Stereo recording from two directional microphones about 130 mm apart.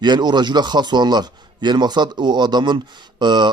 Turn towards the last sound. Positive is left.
turn(degrees=-35)  # may be behind; listen again after turning